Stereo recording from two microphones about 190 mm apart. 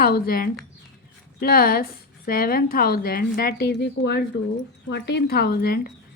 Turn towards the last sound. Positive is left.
turn(degrees=55)  # may be behind; listen again after turning